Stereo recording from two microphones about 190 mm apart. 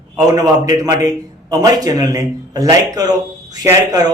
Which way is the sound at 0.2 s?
20° right (ahead or behind).